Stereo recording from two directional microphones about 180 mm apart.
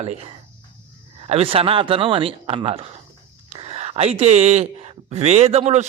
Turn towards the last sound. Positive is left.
turn(degrees=-35)  # may be behind; listen again after turning